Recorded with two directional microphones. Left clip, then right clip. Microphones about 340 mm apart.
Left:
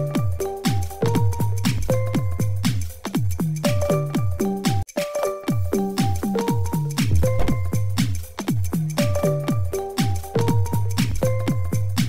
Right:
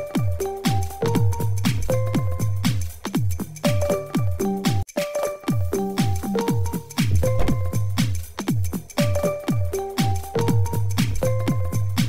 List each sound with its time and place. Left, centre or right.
0.1 s music: centre